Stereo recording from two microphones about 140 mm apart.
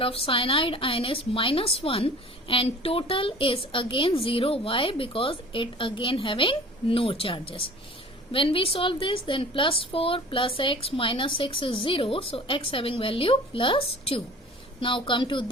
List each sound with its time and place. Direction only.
0.0 s a woman's voice: 40° left (ahead or behind)